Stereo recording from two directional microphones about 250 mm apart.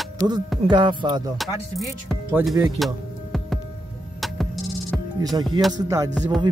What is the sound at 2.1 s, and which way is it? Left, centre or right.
Speech, centre.